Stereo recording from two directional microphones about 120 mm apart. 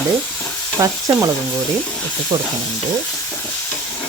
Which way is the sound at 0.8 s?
30° right (ahead or behind).